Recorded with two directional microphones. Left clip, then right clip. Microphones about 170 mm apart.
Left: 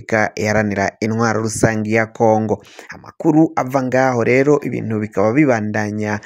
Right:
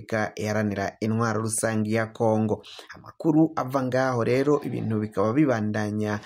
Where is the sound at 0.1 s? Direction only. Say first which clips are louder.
Left 11 dB; 45° left (ahead or behind).